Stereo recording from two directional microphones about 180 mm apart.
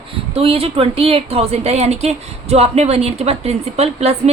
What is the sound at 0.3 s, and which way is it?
A woman's voice, 35° right (ahead or behind).